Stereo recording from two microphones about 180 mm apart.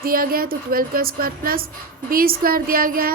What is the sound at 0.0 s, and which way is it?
A woman's voice, 55° right (ahead or behind).